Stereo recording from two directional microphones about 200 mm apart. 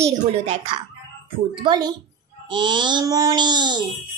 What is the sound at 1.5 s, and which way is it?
A child's voice, 20° right (ahead or behind).